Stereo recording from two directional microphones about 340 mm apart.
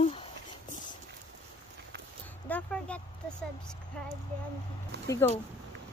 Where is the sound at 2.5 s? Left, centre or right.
Centre.